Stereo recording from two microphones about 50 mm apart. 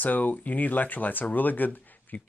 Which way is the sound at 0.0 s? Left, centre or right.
Left.